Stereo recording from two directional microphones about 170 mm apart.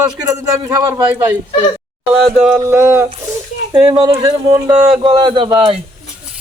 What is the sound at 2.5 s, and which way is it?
Speech, 15° right (ahead or behind).